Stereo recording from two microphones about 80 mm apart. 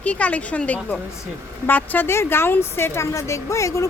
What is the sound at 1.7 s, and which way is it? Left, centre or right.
Speech, left.